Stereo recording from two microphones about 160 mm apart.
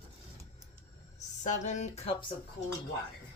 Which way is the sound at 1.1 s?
50° left (ahead or behind).